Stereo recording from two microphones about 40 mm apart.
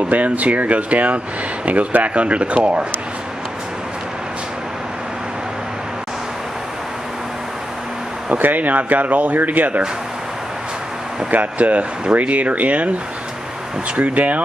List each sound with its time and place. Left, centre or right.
0.0 s speech: right
8.4 s speech: right
11.2 s speech: right
13.9 s speech: right